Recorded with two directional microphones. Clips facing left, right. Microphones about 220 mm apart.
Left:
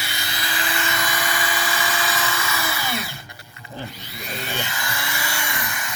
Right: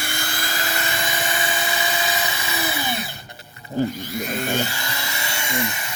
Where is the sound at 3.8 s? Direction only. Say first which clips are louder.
Right 13 dB; 45° right (ahead or behind).